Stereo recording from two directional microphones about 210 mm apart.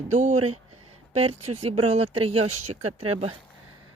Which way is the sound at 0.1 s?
35° right (ahead or behind).